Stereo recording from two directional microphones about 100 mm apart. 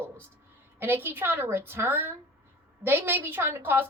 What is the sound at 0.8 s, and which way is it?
A woman's voice, 20° right (ahead or behind).